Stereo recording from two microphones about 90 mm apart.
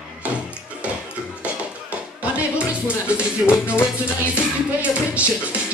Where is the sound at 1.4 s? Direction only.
15° right (ahead or behind).